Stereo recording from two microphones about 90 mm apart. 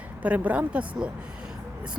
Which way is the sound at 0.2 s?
15° right (ahead or behind).